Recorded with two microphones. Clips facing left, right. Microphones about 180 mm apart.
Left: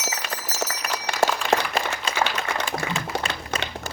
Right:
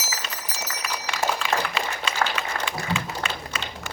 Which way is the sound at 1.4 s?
45° left (ahead or behind).